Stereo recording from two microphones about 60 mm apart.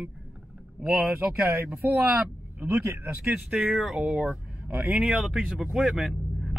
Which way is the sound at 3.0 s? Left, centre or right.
Right.